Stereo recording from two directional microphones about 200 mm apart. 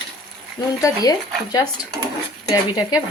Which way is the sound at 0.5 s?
20° left (ahead or behind).